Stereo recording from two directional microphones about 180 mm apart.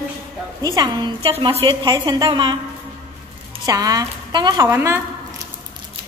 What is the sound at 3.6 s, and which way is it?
A woman's voice, 20° right (ahead or behind).